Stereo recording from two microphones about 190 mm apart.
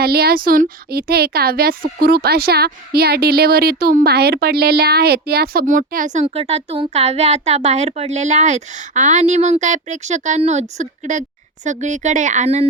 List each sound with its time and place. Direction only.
0.0 s speech: 55° right (ahead or behind)
6.2 s speech: 30° right (ahead or behind)